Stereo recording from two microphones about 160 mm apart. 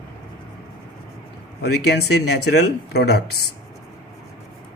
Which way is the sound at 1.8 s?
90° left.